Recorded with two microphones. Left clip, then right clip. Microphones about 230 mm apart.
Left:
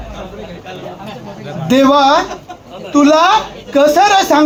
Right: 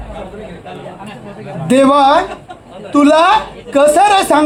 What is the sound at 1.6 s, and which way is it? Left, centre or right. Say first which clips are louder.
A woman's voice: right 1 dB; right.